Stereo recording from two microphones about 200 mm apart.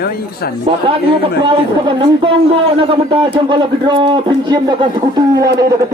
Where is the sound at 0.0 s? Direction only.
50° left (ahead or behind).